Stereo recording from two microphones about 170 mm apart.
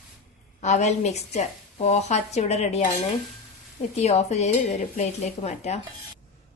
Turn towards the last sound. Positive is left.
turn(degrees=40)  # may be behind; listen again after turning